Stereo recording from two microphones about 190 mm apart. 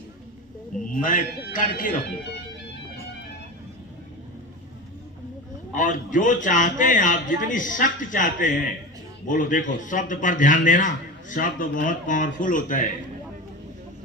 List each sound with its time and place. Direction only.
1.0 s a man's voice: 45° left (ahead or behind)
5.7 s a man's voice: 45° left (ahead or behind)